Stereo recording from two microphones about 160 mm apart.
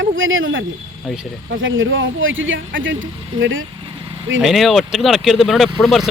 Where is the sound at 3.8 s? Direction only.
30° right (ahead or behind).